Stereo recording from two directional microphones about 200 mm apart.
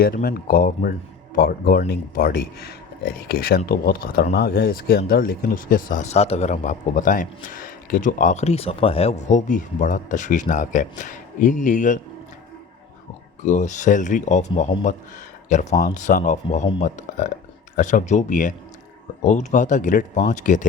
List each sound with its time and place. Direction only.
0.0 s speech: 50° left (ahead or behind)
13.4 s speech: 35° left (ahead or behind)